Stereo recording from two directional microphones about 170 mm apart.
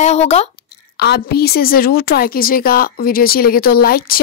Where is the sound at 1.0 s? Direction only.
70° left (ahead or behind).